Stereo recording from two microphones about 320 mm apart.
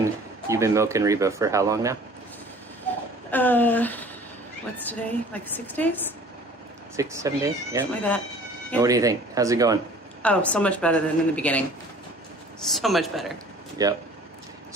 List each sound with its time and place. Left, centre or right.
0.4 s speech: centre
3.2 s a woman's voice: centre
6.9 s speech: centre
10.2 s a woman's voice: centre
13.8 s speech: centre